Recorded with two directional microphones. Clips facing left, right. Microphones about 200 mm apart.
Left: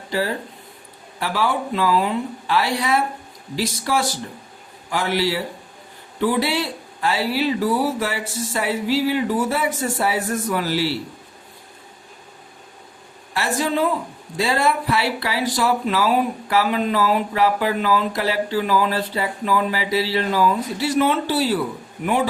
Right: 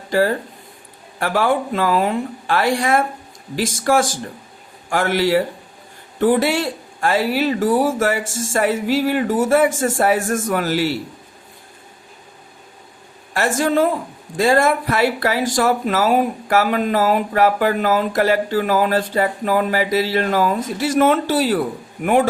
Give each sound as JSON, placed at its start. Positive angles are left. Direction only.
{"t": 0.1, "sound": "speech", "side_deg": -50}
{"t": 13.3, "sound": "speech", "side_deg": -50}